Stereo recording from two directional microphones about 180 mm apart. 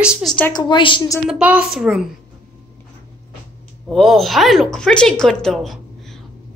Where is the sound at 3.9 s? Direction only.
Centre (ahead or behind).